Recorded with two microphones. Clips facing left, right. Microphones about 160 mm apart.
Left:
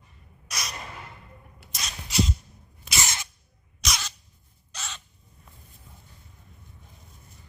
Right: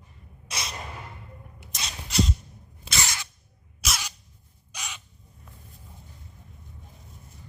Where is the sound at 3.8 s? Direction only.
10° right (ahead or behind).